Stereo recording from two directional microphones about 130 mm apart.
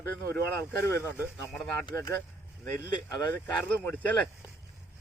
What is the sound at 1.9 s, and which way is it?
Speech, 20° left (ahead or behind).